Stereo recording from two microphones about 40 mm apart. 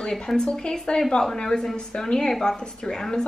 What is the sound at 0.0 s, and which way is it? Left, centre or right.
A woman's voice, centre.